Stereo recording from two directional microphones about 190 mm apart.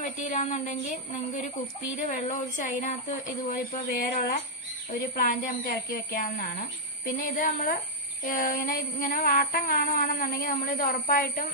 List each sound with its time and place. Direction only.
0.0 s a woman's voice: 40° left (ahead or behind)
2.0 s child singing: 45° left (ahead or behind)